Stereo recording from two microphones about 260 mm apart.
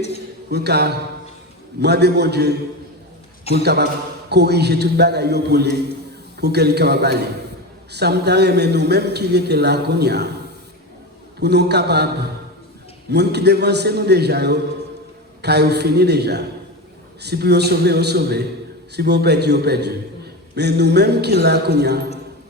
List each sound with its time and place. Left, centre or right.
0.5 s a man's voice: right
11.3 s a man's voice: right